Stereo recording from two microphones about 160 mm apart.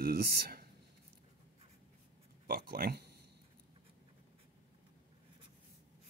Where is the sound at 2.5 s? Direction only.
65° right (ahead or behind).